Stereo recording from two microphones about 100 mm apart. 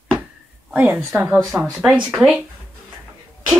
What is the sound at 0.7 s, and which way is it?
Speech, 15° right (ahead or behind).